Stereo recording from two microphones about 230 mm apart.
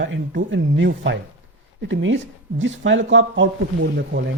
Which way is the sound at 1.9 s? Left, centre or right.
Right.